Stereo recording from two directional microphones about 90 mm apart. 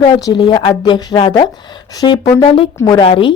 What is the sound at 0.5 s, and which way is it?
Speech, 55° left (ahead or behind).